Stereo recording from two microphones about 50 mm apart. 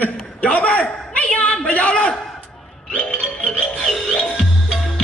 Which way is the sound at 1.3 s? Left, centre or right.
Left.